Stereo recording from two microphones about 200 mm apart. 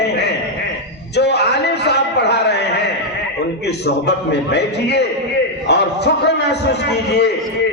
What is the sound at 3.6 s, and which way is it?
A man's voice, 55° left (ahead or behind).